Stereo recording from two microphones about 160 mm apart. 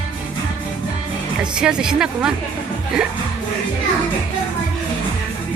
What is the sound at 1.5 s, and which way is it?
Speech, 5° right (ahead or behind).